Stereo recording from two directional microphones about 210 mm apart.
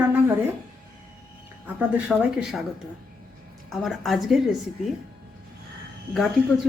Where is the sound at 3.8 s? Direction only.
Centre (ahead or behind).